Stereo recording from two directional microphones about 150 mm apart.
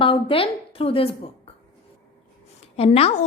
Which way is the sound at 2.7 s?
40° left (ahead or behind).